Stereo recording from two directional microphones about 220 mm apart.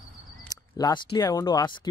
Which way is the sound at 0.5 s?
20° left (ahead or behind).